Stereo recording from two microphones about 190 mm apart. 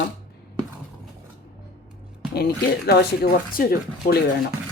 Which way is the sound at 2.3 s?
55° left (ahead or behind).